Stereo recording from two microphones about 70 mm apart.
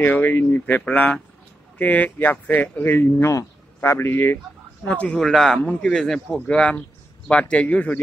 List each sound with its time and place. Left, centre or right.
0.0 s speech: left
3.3 s speech: left
4.8 s speech: centre
6.5 s speech: centre